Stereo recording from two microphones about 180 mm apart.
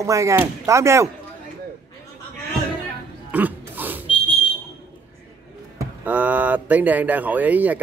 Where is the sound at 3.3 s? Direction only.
10° right (ahead or behind).